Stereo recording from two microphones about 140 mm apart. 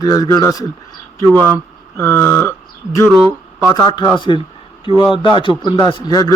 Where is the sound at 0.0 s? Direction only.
25° left (ahead or behind).